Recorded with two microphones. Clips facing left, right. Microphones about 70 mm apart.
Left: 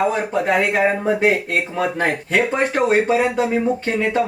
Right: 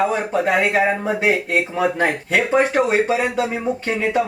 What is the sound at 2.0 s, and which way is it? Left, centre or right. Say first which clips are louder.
Speech: even; centre.